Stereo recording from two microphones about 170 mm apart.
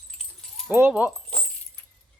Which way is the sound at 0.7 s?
10° right (ahead or behind).